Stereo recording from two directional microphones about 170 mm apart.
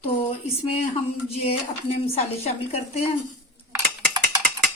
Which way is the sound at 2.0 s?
40° left (ahead or behind).